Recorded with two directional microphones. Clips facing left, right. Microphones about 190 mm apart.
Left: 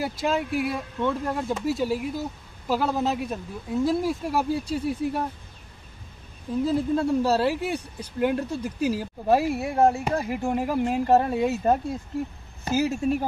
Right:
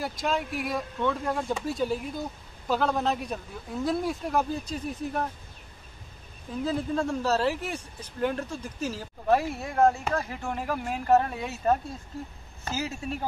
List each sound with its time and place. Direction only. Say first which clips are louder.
0.0 s speech: left 3 dB; 5° left (ahead or behind)
6.6 s speech: left 4 dB; 5° left (ahead or behind)